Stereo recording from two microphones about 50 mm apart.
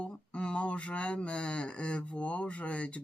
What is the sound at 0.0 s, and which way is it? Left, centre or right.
Speech, left.